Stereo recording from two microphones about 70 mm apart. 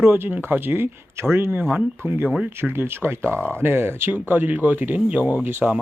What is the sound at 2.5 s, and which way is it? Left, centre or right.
Speech, right.